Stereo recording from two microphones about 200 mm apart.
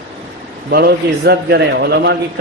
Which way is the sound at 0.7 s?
50° right (ahead or behind).